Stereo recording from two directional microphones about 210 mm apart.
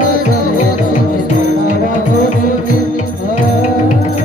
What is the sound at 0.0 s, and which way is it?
Music, 40° left (ahead or behind).